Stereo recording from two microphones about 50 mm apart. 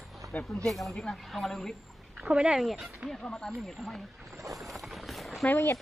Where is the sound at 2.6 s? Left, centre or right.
Centre.